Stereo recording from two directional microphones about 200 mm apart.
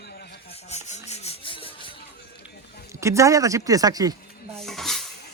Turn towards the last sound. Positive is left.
turn(degrees=0)  # may be behind; listen again after turning